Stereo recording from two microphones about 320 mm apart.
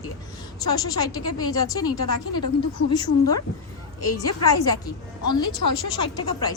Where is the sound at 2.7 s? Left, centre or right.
Left.